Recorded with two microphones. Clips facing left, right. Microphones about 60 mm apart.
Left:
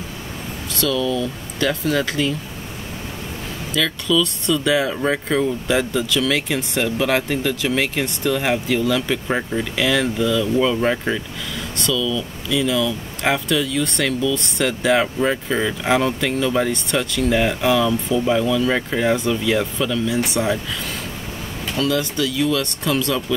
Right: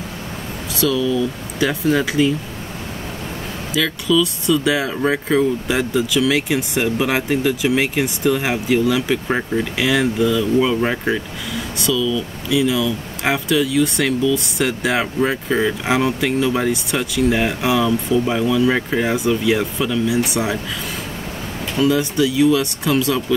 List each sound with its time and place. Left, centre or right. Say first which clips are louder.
0.7 s speech: right 3 dB; centre
3.7 s speech: right 2 dB; centre
21.7 s speech: right 4 dB; centre